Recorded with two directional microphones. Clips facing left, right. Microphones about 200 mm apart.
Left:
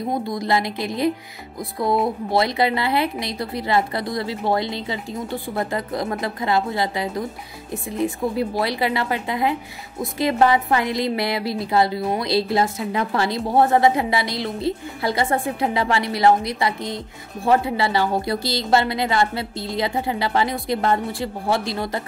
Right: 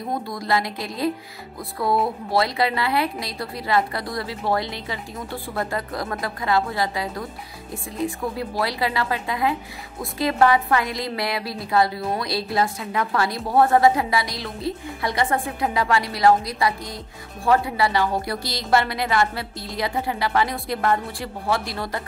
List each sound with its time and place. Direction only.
0.1 s a woman's voice: 20° left (ahead or behind)
8.4 s a woman's voice: 25° left (ahead or behind)